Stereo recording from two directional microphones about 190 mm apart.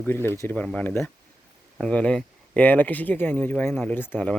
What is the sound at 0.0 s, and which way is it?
Speech, 10° left (ahead or behind).